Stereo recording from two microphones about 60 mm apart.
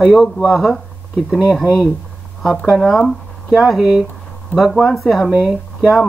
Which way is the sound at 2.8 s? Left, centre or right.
Centre.